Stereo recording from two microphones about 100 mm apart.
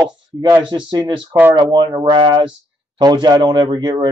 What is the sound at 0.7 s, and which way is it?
Speech, 50° right (ahead or behind).